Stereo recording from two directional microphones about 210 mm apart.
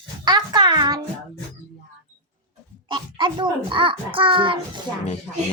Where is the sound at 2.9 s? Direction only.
20° right (ahead or behind).